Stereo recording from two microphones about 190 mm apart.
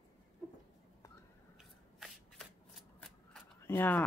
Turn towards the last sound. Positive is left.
turn(degrees=10)  # may be behind; listen again after turning